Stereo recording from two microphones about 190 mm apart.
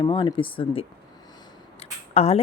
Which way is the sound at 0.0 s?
25° left (ahead or behind).